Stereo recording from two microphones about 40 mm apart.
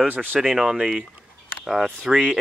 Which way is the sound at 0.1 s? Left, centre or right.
Right.